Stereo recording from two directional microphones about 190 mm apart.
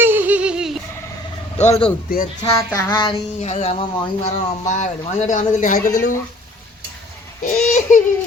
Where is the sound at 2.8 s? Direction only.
20° left (ahead or behind).